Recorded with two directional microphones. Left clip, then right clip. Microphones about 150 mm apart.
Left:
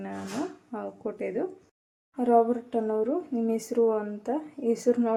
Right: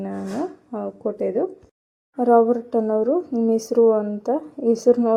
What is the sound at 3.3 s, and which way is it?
Speech, 10° right (ahead or behind).